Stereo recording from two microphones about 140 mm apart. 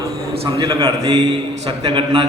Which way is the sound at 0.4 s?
30° right (ahead or behind).